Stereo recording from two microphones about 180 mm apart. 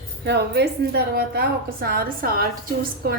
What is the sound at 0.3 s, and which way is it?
A woman's voice, 65° right (ahead or behind).